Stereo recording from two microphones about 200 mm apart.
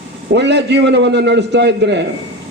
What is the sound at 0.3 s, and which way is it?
A man's voice, 60° right (ahead or behind).